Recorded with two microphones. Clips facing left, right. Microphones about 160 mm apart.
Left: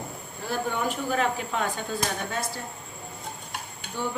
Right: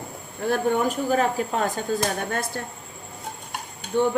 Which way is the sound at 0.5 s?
40° right (ahead or behind).